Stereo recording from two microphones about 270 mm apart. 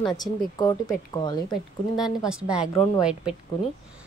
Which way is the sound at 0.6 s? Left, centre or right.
Centre.